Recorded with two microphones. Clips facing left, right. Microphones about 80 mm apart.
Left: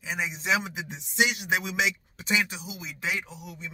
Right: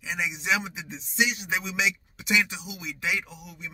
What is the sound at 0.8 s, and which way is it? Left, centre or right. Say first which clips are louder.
Speech: even; left.